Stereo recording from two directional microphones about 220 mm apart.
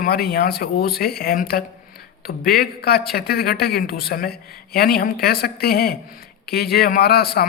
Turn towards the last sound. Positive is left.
turn(degrees=45)  # may be behind; listen again after turning